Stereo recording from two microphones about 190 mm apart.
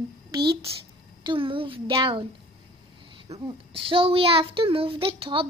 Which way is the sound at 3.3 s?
30° right (ahead or behind).